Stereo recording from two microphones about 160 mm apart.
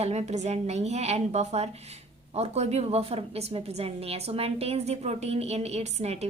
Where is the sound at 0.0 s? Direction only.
45° right (ahead or behind).